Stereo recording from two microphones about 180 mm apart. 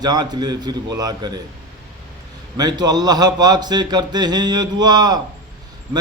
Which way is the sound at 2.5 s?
20° right (ahead or behind).